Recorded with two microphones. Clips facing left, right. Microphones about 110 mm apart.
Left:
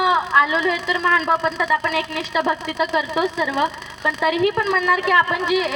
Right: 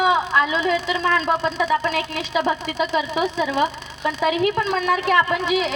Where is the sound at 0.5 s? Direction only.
30° right (ahead or behind).